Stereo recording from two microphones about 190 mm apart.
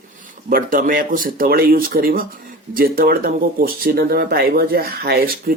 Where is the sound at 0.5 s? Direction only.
45° right (ahead or behind).